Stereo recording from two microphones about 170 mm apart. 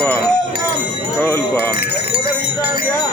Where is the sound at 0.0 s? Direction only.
10° left (ahead or behind).